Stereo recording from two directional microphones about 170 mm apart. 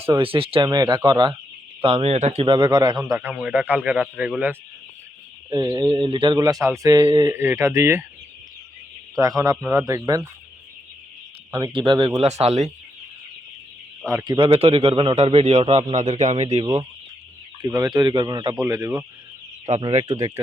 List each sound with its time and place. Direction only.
0.1 s speech: 30° right (ahead or behind); by 4.5 s 10° right (ahead or behind)
5.5 s speech: 25° right (ahead or behind)
7.3 s speech: 15° right (ahead or behind)
9.1 s speech: 20° right (ahead or behind)
11.5 s a man's voice: 30° right (ahead or behind)
14.3 s a man's voice: 30° right (ahead or behind)
17.6 s speech: 25° right (ahead or behind)
18.8 s speech: 10° right (ahead or behind)
19.7 s a man's voice: 40° right (ahead or behind)
20.1 s speech: 20° right (ahead or behind)